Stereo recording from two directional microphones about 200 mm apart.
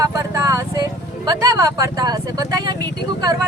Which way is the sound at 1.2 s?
20° right (ahead or behind).